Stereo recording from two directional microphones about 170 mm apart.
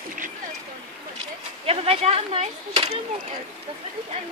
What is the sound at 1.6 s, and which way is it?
Speech, 35° right (ahead or behind).